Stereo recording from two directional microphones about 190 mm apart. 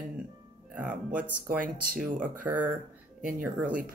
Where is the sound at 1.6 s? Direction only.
45° right (ahead or behind).